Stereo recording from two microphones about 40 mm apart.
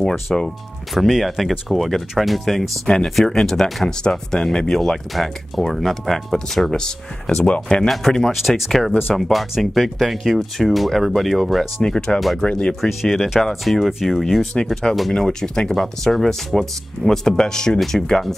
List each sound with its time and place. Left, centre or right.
0.0 s speech: centre
8.2 s speech: centre
11.8 s speech: centre
12.2 s speech: centre
12.4 s speech: left
12.8 s speech: centre
15.1 s speech: centre